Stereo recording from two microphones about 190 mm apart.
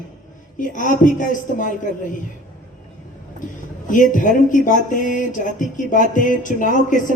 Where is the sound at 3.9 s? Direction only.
45° left (ahead or behind).